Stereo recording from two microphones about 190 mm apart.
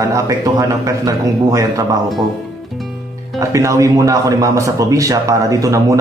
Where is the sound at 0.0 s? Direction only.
15° right (ahead or behind).